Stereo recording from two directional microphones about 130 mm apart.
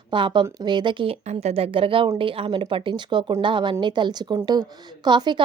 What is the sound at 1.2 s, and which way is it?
A woman's voice, 55° right (ahead or behind).